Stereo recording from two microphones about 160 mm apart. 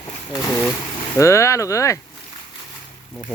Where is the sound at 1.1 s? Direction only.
20° left (ahead or behind).